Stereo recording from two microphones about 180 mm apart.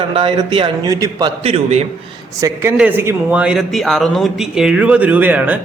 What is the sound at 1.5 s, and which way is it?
Speech, 35° right (ahead or behind).